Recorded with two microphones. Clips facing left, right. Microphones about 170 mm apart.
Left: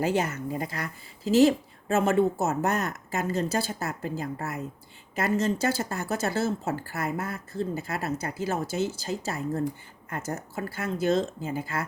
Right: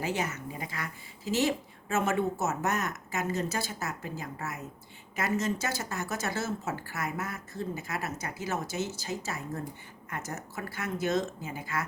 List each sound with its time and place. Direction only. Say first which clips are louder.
0.5 s a woman's voice: left 6 dB; 35° left (ahead or behind)